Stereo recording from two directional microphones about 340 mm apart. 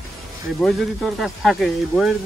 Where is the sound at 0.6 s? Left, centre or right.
Centre.